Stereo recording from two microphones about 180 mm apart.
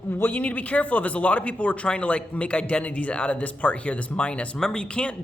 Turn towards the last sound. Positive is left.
turn(degrees=5)  # may be behind; listen again after turning